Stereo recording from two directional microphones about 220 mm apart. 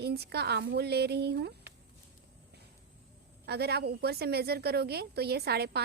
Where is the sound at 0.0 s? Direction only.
50° right (ahead or behind).